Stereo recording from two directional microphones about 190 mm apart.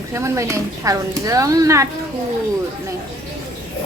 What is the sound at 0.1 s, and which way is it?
Speech, 15° right (ahead or behind).